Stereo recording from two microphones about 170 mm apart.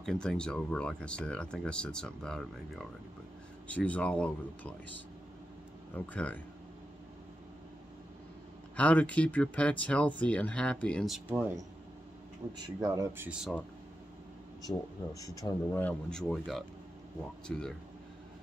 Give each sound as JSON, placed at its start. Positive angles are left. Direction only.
{"t": 0.0, "sound": "speech", "side_deg": 5}
{"t": 5.9, "sound": "speech", "side_deg": 10}
{"t": 8.7, "sound": "speech", "side_deg": 10}
{"t": 12.5, "sound": "speech", "side_deg": -20}
{"t": 13.3, "sound": "speech", "side_deg": -5}
{"t": 15.1, "sound": "speech", "side_deg": 20}
{"t": 15.8, "sound": "speech", "side_deg": 5}